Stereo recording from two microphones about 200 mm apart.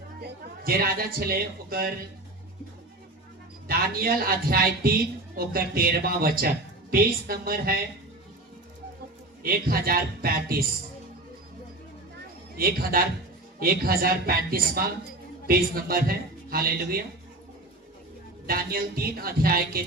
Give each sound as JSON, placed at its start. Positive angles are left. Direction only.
{"t": 0.2, "sound": "a man's voice", "side_deg": -50}
{"t": 3.7, "sound": "speech", "side_deg": -50}
{"t": 9.4, "sound": "speech", "side_deg": -50}
{"t": 12.5, "sound": "speech", "side_deg": -45}
{"t": 18.4, "sound": "speech", "side_deg": -50}